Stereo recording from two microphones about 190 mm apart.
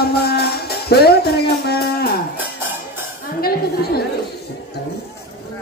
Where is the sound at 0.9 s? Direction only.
55° left (ahead or behind).